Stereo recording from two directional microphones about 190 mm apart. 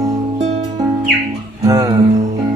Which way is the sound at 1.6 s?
20° right (ahead or behind).